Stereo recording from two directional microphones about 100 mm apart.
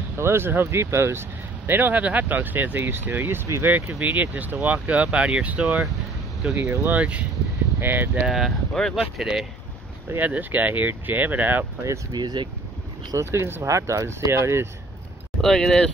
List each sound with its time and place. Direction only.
0.2 s speech: 25° right (ahead or behind)
6.5 s speech: 25° right (ahead or behind)
7.0 s speech: 15° right (ahead or behind)
8.3 s speech: centre (ahead or behind)
10.0 s speech: 20° right (ahead or behind)
12.1 s speech: 45° right (ahead or behind)
13.1 s speech: 25° right (ahead or behind)
15.4 s speech: 5° left (ahead or behind)